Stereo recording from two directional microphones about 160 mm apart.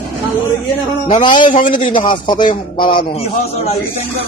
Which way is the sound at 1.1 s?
30° left (ahead or behind).